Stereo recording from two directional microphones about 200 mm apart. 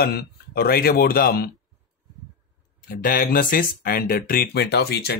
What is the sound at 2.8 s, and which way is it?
Speech, 45° left (ahead or behind).